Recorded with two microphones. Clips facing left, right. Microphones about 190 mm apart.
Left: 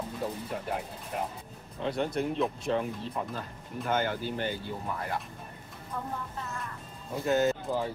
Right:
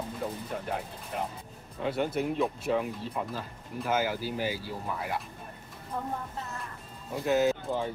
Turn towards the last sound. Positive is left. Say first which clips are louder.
# right 1 dB
turn(degrees=0)  # may be behind; listen again after turning